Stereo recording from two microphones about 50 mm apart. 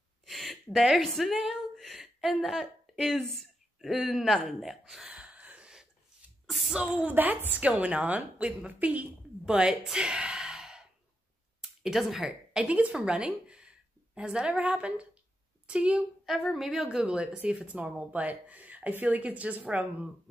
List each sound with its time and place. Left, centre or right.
0.3 s speech: centre
1.5 s a sound: centre
3.9 s speech: centre
5.1 s gasp: right
6.4 s a sound: centre
7.0 s speech: right
9.5 s speech: centre
9.9 s gasp: centre
11.8 s a woman's voice: centre
12.6 s a woman's voice: right
16.5 s speech: centre
16.8 s speech: centre